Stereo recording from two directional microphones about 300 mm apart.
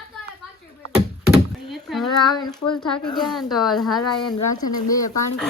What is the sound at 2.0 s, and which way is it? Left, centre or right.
Speech, centre.